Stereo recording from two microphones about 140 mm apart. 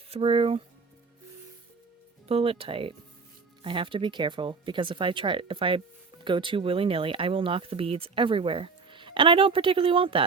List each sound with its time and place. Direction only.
0.1 s speech: 40° right (ahead or behind)
2.2 s speech: 45° right (ahead or behind)